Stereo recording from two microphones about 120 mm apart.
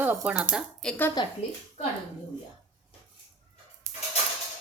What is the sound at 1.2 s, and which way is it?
Speech, 40° left (ahead or behind).